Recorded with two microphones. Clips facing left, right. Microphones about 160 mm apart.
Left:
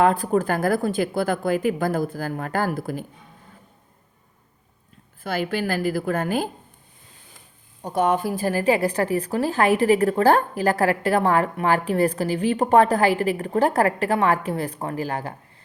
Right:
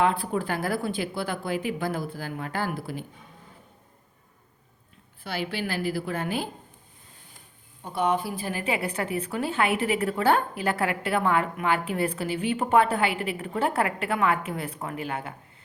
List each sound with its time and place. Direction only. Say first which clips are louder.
0.0 s speech: left 6 dB; 45° left (ahead or behind)
5.2 s speech: left 6 dB; 45° left (ahead or behind)
7.8 s a woman's voice: left 5 dB; 40° left (ahead or behind)